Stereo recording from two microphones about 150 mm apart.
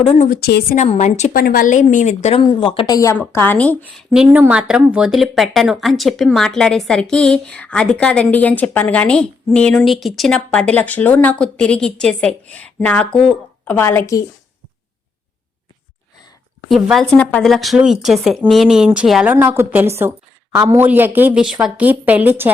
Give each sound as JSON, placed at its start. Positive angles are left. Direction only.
{"t": 0.0, "sound": "a woman's voice", "side_deg": 40}
{"t": 0.3, "sound": "a woman's voice", "side_deg": 90}
{"t": 0.8, "sound": "a woman's voice", "side_deg": 50}
{"t": 1.3, "sound": "a woman's voice", "side_deg": 80}
{"t": 3.2, "sound": "speech", "side_deg": 10}
{"t": 4.1, "sound": "speech", "side_deg": -5}
{"t": 16.6, "sound": "speech", "side_deg": 0}